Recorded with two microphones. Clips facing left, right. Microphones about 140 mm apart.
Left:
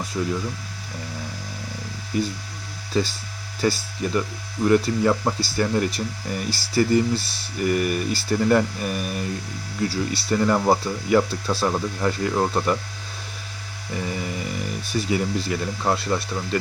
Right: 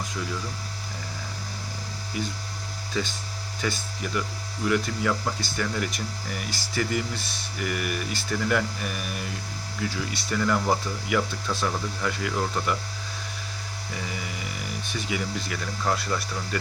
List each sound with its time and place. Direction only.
0.2 s speech: 35° left (ahead or behind)
2.1 s speech: 40° left (ahead or behind)
14.9 s speech: 35° left (ahead or behind)